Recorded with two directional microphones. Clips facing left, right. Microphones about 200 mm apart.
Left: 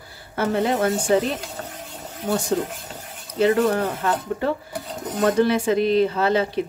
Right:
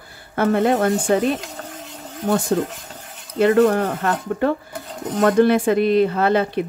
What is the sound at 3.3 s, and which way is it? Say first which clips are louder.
Speech: right 4 dB; 55° right (ahead or behind).